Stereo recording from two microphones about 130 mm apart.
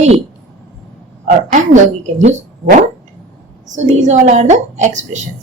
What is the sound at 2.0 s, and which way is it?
A woman's voice, 70° right (ahead or behind).